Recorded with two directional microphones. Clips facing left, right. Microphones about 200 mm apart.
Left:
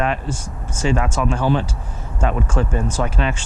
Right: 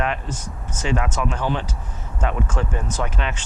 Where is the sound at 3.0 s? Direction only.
30° left (ahead or behind).